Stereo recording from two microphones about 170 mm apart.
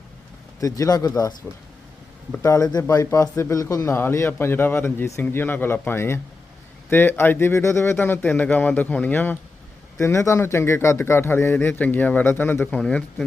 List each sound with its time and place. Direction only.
0.6 s speech: 20° left (ahead or behind)
2.4 s speech: 20° left (ahead or behind)